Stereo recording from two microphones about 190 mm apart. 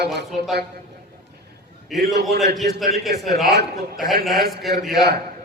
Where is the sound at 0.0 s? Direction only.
60° right (ahead or behind).